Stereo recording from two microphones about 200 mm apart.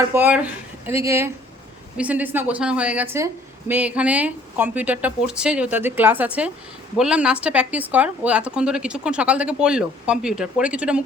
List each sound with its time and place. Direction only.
0.1 s a woman's voice: 10° right (ahead or behind)